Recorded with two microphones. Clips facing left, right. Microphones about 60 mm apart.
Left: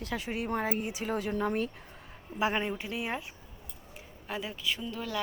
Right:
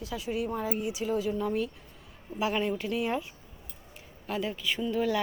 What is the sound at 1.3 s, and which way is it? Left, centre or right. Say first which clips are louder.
Speech: even; left.